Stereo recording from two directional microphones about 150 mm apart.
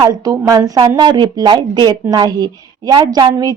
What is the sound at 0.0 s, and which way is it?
Speech, 25° right (ahead or behind).